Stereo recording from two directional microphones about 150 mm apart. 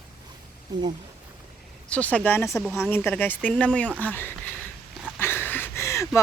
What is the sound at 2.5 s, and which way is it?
Speech, centre (ahead or behind).